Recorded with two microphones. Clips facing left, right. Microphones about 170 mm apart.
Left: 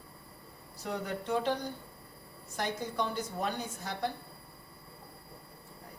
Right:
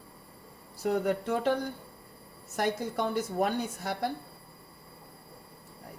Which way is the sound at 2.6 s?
55° right (ahead or behind).